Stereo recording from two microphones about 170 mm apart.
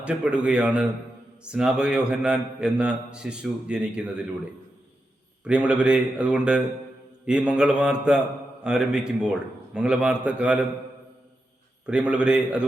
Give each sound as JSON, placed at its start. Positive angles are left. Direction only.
{"t": 0.0, "sound": "a man's voice", "side_deg": -5}
{"t": 5.5, "sound": "a man's voice", "side_deg": -10}
{"t": 11.9, "sound": "speech", "side_deg": -5}